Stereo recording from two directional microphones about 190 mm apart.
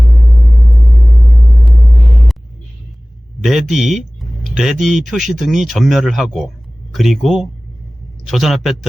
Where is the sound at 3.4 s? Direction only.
Centre (ahead or behind).